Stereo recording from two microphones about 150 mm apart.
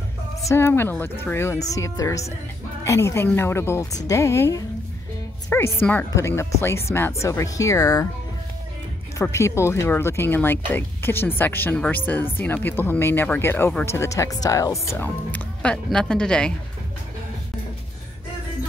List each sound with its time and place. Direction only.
0.5 s speech: 15° left (ahead or behind)
9.2 s speech: 20° left (ahead or behind)